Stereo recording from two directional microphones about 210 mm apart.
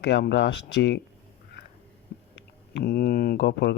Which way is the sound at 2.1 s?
45° left (ahead or behind).